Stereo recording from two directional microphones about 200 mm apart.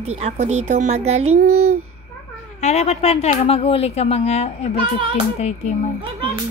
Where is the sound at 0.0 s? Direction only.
35° right (ahead or behind).